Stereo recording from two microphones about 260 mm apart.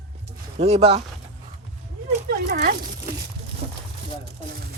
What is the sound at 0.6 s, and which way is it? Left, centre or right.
Speech, right.